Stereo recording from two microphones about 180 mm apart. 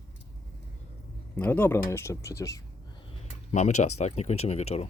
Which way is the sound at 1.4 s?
10° left (ahead or behind).